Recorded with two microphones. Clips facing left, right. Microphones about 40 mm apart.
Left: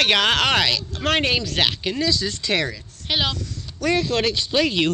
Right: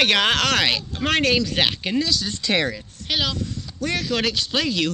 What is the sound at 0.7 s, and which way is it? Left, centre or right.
Speech, right.